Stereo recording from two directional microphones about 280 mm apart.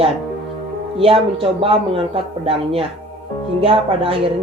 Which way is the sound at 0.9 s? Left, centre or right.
Centre.